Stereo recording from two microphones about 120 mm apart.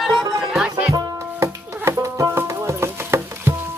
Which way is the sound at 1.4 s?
25° right (ahead or behind).